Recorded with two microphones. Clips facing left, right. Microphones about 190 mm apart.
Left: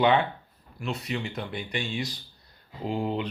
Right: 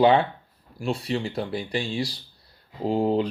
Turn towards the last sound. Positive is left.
turn(degrees=-35)  # may be behind; listen again after turning